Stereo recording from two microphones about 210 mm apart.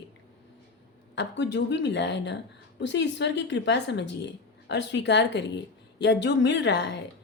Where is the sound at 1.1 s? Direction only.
60° left (ahead or behind).